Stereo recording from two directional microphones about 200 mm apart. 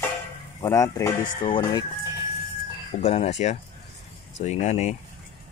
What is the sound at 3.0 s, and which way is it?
Speech, 30° left (ahead or behind).